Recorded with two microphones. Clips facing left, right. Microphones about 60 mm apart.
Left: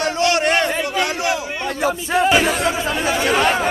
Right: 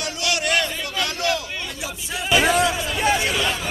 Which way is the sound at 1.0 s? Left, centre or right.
Left.